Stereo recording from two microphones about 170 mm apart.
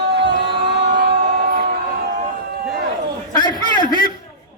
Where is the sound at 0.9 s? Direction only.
50° right (ahead or behind).